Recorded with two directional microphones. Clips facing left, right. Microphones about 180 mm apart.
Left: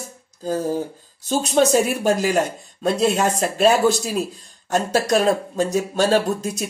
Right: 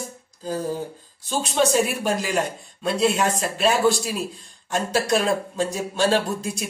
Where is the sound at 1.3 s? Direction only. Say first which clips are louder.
Left 4 dB; 40° left (ahead or behind).